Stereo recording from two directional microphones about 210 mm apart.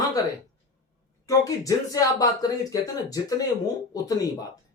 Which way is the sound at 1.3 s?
15° left (ahead or behind).